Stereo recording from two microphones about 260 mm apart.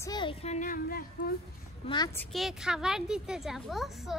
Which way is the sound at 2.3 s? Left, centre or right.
Centre.